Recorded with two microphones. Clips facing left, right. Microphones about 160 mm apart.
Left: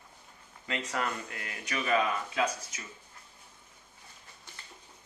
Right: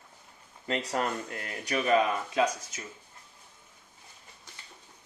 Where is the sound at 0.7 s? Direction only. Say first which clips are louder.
Right 4 dB; 35° right (ahead or behind).